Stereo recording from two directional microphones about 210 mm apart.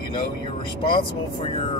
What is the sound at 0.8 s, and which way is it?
Speech, 20° left (ahead or behind).